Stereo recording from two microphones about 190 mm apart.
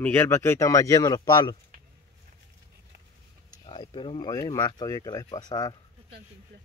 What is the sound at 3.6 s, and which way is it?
Speech, 25° left (ahead or behind).